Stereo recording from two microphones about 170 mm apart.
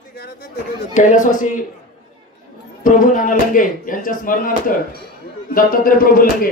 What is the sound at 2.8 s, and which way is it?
Speech, 50° left (ahead or behind).